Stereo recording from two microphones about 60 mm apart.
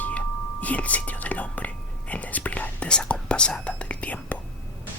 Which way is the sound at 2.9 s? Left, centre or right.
Centre.